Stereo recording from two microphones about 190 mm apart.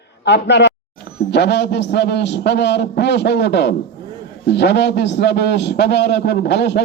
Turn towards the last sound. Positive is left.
turn(degrees=60)  # may be behind; listen again after turning